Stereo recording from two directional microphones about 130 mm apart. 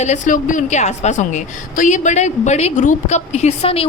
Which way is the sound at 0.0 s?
75° left (ahead or behind).